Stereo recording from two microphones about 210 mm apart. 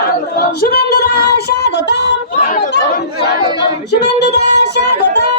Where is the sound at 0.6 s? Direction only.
45° left (ahead or behind).